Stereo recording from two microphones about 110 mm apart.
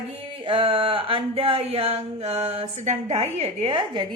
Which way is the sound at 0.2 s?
55° right (ahead or behind).